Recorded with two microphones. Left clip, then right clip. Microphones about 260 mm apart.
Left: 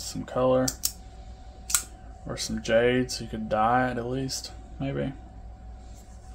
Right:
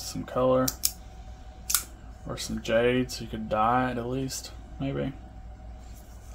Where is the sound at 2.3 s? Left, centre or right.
Centre.